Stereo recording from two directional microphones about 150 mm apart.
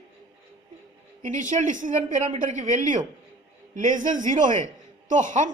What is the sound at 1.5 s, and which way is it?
A woman's voice, 55° right (ahead or behind).